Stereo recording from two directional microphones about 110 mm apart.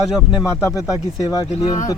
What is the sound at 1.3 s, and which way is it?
Speech, 35° left (ahead or behind).